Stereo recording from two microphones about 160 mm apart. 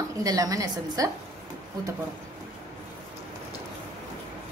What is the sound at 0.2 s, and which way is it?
Speech, 20° right (ahead or behind).